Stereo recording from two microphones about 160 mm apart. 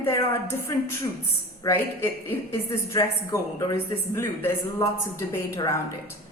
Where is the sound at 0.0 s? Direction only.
15° left (ahead or behind).